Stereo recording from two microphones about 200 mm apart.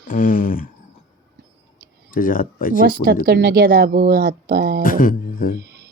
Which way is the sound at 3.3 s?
55° right (ahead or behind).